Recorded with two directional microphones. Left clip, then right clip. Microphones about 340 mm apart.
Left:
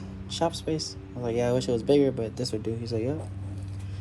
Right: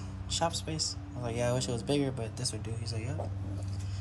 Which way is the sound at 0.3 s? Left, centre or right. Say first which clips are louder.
Left 5 dB; centre.